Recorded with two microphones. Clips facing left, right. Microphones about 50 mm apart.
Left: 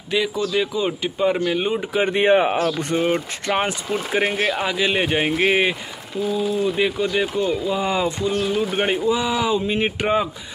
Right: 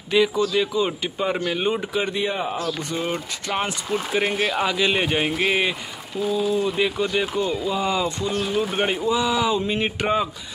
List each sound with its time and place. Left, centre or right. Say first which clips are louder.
0.1 s speech: right 2 dB; centre
2.1 s speech: left 8 dB; left
3.4 s speech: left 3 dB; left
6.3 s speech: left 1 dB; centre